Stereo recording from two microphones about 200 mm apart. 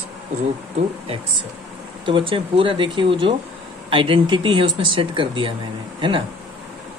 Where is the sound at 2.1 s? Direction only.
25° right (ahead or behind).